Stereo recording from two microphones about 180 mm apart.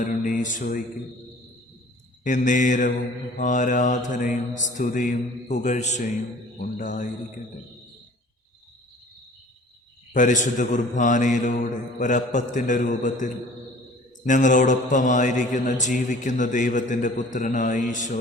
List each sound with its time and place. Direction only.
0.0 s mantra: 45° left (ahead or behind)
2.2 s mantra: 45° left (ahead or behind)
10.1 s mantra: 45° left (ahead or behind)